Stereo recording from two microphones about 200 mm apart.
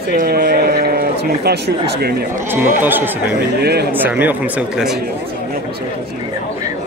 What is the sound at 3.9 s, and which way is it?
Speech, 10° right (ahead or behind).